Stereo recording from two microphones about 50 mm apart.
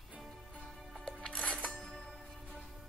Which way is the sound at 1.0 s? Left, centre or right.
Centre.